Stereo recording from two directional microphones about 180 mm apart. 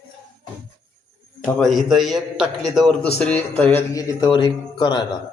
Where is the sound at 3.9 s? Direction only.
20° left (ahead or behind).